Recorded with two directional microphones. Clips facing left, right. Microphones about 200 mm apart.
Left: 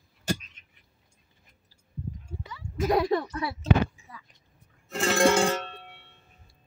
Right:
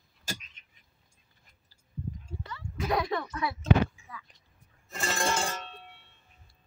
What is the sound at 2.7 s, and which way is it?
Speech, 40° left (ahead or behind).